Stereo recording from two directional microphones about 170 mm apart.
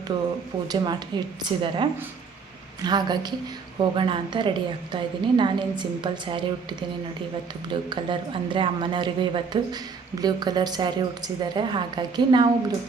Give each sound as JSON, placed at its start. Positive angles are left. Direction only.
{"t": 0.7, "sound": "speech", "side_deg": -25}